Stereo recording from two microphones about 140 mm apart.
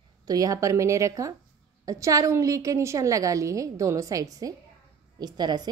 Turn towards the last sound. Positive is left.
turn(degrees=-30)  # may be behind; listen again after turning